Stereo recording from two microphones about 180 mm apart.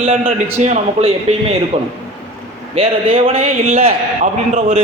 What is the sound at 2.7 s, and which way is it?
A man's voice, 30° right (ahead or behind).